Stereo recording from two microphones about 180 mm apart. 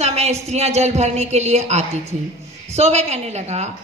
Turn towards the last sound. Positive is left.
turn(degrees=-40)  # may be behind; listen again after turning